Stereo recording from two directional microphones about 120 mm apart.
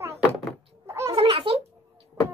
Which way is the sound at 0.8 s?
20° right (ahead or behind).